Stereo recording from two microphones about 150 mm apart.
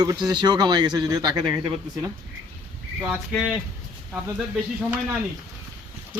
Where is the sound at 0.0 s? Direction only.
25° right (ahead or behind).